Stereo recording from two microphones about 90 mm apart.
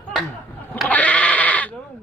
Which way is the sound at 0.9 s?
15° left (ahead or behind).